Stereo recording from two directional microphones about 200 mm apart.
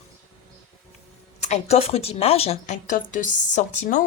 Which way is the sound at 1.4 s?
35° left (ahead or behind).